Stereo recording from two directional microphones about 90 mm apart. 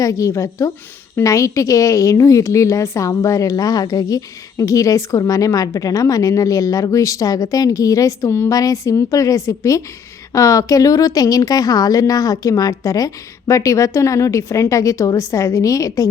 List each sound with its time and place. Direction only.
0.0 s a woman's voice: 35° left (ahead or behind)